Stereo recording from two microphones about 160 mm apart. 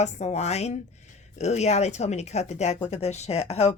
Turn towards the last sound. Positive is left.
turn(degrees=40)  # may be behind; listen again after turning